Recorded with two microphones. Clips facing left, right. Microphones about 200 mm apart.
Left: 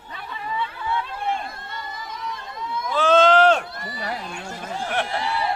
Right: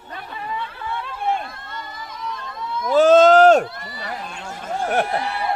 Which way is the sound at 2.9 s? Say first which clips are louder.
Right 5 dB; 45° right (ahead or behind).